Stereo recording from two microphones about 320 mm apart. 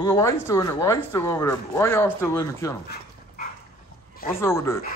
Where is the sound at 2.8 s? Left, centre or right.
Left.